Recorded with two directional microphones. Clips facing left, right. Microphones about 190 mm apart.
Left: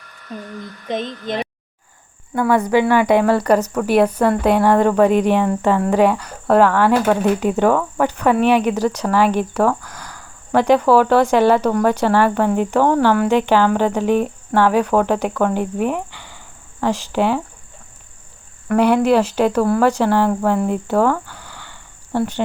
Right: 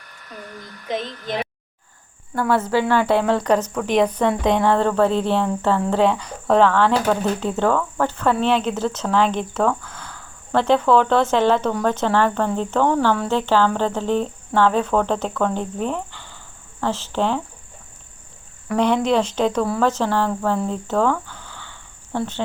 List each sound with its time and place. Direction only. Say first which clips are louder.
0.9 s speech: left 2 dB; 20° left (ahead or behind)
2.4 s speech: left 4 dB; 15° left (ahead or behind)
18.7 s speech: left 4 dB; 10° left (ahead or behind)